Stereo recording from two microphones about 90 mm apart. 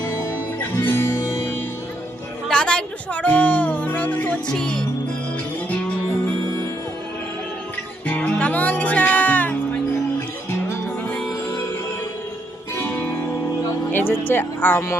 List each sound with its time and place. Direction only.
0.0 s music: 30° left (ahead or behind)
2.5 s speech: 10° left (ahead or behind)
8.0 s music: 15° left (ahead or behind)
12.7 s music: 25° left (ahead or behind)
13.9 s speech: 25° left (ahead or behind)